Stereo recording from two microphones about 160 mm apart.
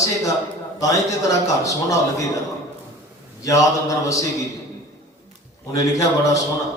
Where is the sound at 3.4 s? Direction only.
20° left (ahead or behind).